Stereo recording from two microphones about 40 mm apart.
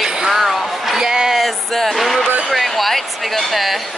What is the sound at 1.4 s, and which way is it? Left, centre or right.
Speech, centre.